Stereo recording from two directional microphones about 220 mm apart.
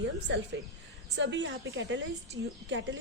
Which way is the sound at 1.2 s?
55° right (ahead or behind).